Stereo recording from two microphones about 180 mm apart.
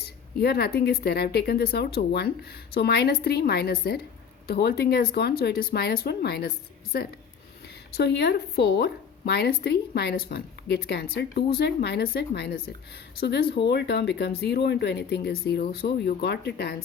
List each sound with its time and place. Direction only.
0.0 s a woman's voice: 60° left (ahead or behind)
7.9 s a woman's voice: 65° left (ahead or behind)